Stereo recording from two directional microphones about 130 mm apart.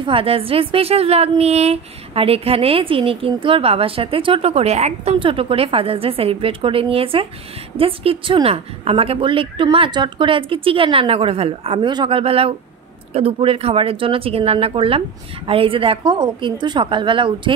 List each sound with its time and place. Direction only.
0.0 s a woman's voice: 45° right (ahead or behind)